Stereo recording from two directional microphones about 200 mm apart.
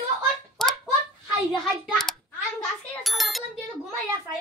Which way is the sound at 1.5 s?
Centre (ahead or behind).